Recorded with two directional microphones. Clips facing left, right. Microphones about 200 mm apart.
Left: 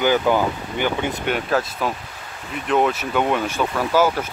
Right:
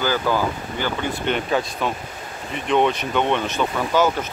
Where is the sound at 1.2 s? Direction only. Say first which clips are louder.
Right 1 dB; 5° left (ahead or behind).